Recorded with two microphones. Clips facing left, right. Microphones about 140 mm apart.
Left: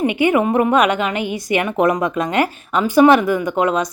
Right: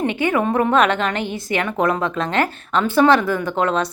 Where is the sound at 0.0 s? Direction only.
15° left (ahead or behind).